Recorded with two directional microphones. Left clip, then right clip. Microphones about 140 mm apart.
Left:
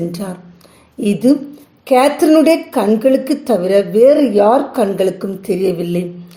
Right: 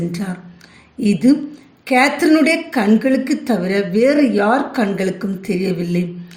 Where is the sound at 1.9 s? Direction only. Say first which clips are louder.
Left 3 dB; 35° left (ahead or behind).